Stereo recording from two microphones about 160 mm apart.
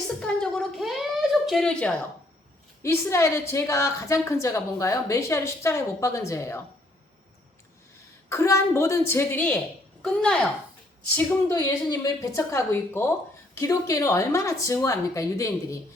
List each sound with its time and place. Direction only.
0.2 s a child's voice: 5° left (ahead or behind)
2.8 s a woman's voice: 15° left (ahead or behind)
8.3 s a woman's voice: 20° left (ahead or behind)